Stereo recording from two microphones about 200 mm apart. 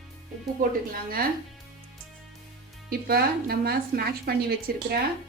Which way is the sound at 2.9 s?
50° right (ahead or behind).